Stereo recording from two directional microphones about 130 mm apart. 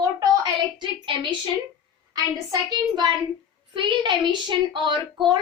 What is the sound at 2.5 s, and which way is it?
A woman's voice, 30° right (ahead or behind).